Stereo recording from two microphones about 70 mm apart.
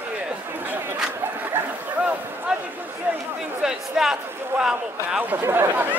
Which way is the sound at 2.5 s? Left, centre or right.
Centre.